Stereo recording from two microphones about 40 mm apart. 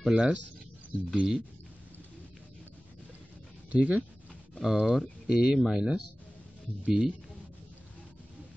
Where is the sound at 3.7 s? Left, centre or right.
Right.